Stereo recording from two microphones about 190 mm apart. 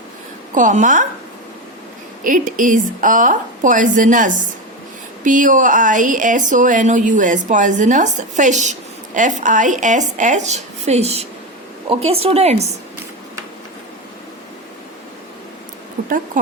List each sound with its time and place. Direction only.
0.5 s a woman's voice: 40° right (ahead or behind)
2.2 s a woman's voice: 45° right (ahead or behind)
16.0 s a sound: 45° right (ahead or behind)